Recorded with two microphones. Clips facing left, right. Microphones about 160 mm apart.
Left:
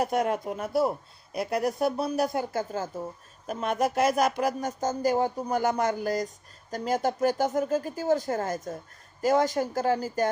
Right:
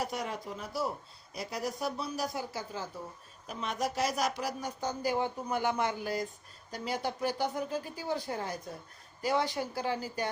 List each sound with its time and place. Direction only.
0.0 s speech: 55° left (ahead or behind)